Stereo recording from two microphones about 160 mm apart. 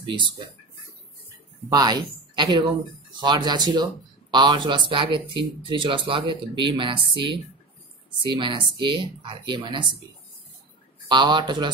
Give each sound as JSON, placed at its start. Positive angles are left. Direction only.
{"t": 0.0, "sound": "speech", "side_deg": -30}
{"t": 1.7, "sound": "a woman's voice", "side_deg": -25}
{"t": 11.1, "sound": "speech", "side_deg": -30}